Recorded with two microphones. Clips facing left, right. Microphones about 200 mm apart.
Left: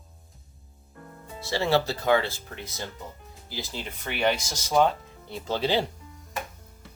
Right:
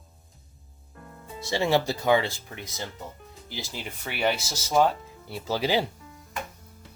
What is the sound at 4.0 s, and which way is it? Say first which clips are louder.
Speech: left 1 dB; 5° right (ahead or behind).